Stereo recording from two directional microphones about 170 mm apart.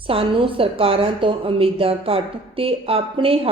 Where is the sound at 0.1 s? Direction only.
30° right (ahead or behind).